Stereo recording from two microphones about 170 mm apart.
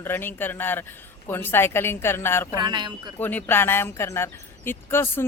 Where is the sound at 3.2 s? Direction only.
10° left (ahead or behind).